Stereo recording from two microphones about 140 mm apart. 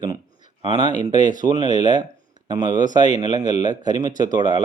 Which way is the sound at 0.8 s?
55° left (ahead or behind).